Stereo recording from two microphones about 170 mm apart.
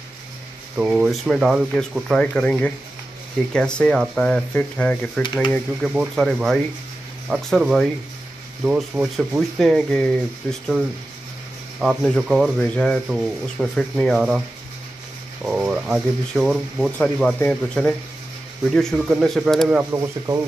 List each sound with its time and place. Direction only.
0.7 s speech: 5° right (ahead or behind)
11.8 s speech: centre (ahead or behind)
15.4 s speech: 5° right (ahead or behind)
19.9 s speech: 20° right (ahead or behind)